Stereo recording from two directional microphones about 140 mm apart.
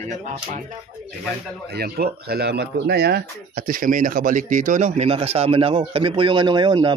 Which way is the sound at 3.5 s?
80° right.